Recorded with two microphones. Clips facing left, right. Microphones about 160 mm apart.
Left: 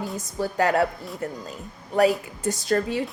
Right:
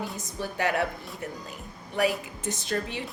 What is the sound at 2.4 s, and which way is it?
Speech, 40° left (ahead or behind).